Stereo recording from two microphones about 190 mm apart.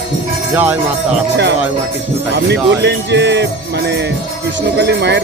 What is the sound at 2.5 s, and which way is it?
Music, 65° right (ahead or behind).